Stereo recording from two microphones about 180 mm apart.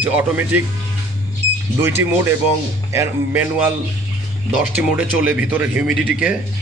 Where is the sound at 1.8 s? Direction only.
15° right (ahead or behind).